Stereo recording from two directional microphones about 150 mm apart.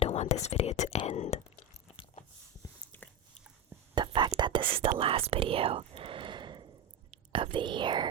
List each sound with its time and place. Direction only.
0.0 s whispering: 45° left (ahead or behind)
2.9 s a sound: 15° left (ahead or behind)
3.9 s whispering: 30° right (ahead or behind)
7.3 s speech: 35° right (ahead or behind)